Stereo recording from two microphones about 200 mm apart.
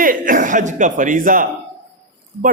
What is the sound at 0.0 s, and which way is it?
Speech, 45° right (ahead or behind).